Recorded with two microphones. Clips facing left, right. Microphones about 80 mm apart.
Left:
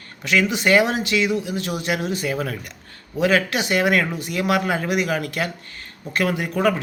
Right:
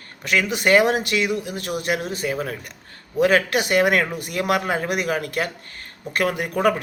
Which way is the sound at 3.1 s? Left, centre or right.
Right.